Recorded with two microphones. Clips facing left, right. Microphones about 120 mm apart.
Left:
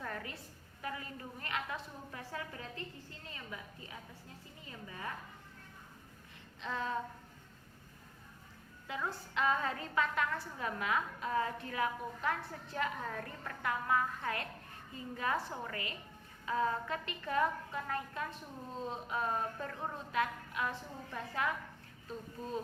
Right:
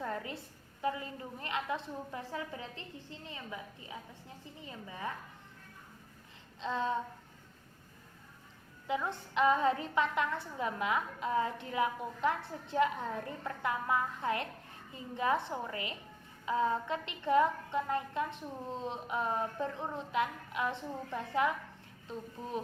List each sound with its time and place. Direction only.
0.0 s a woman's voice: 25° right (ahead or behind)
6.6 s a woman's voice: 25° right (ahead or behind)
8.9 s a woman's voice: 20° right (ahead or behind)